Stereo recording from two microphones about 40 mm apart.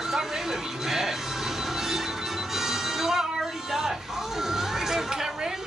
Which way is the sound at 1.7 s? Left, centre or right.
Centre.